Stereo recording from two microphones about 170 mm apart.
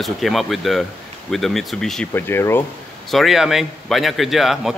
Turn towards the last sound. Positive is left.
turn(degrees=0)  # may be behind; listen again after turning